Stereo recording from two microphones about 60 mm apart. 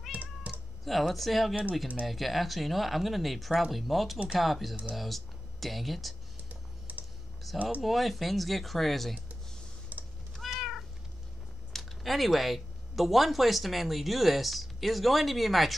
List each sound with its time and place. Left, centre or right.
0.1 s cat: right
0.8 s speech: centre
6.5 s computer keyboard: right
7.5 s a sound: centre
7.8 s speech: centre
9.9 s meow: right
10.5 s cat: centre
11.7 s speech: centre